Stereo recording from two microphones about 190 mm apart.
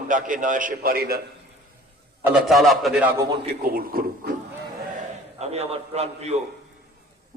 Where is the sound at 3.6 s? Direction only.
50° right (ahead or behind).